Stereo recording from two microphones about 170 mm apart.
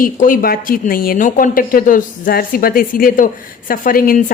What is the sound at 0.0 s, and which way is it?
A woman's voice, 55° left (ahead or behind).